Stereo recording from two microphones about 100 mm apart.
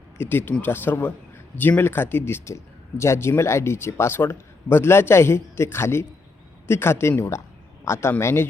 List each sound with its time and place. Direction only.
0.2 s a man's voice: 20° left (ahead or behind)